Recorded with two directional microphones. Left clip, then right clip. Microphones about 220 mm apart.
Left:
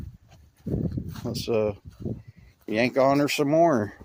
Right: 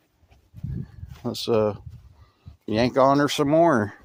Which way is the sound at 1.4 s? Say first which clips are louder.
Right 3 dB; 25° right (ahead or behind).